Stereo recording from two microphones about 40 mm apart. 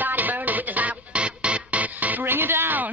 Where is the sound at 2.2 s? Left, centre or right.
Right.